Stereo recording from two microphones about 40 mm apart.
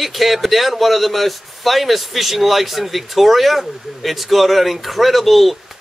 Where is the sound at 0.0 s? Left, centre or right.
Centre.